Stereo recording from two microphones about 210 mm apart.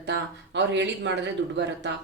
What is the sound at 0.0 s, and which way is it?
A woman's voice, 60° right (ahead or behind).